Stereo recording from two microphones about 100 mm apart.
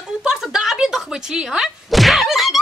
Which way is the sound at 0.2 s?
5° right (ahead or behind).